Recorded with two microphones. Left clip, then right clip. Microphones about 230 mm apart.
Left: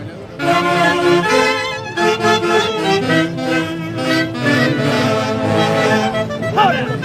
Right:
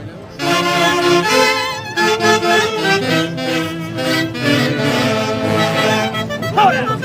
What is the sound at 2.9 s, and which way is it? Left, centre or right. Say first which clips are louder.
Music: even; right.